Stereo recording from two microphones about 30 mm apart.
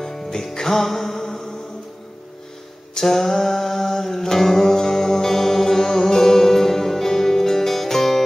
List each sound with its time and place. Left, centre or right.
0.0 s music: centre
3.0 s music: centre